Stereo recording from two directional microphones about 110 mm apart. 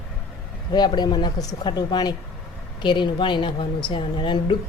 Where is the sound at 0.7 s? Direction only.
40° left (ahead or behind).